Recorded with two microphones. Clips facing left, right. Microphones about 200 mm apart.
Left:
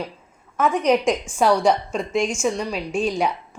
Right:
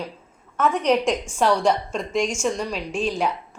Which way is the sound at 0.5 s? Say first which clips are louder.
Left 1 dB; 10° left (ahead or behind).